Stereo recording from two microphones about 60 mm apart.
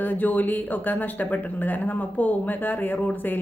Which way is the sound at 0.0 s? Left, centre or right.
Left.